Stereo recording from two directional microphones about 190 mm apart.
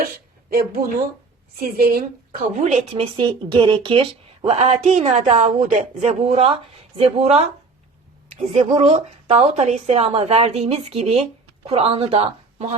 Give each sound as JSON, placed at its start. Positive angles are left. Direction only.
{"t": 0.0, "sound": "a sound", "side_deg": -50}
{"t": 1.5, "sound": "a woman's voice", "side_deg": -50}
{"t": 3.2, "sound": "a woman's voice", "side_deg": -25}
{"t": 8.7, "sound": "a woman's voice", "side_deg": -30}